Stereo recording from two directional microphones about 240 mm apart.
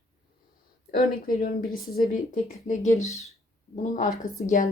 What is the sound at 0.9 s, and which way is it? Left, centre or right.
Speech, left.